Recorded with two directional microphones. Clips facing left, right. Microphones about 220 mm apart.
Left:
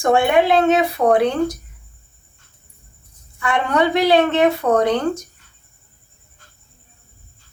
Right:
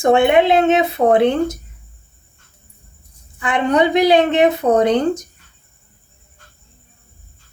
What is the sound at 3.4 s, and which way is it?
Speech, 20° right (ahead or behind).